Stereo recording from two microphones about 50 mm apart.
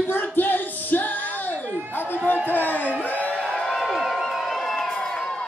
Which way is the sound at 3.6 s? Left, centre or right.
Centre.